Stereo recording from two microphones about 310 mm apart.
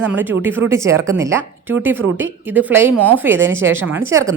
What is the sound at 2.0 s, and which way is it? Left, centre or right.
Speech, right.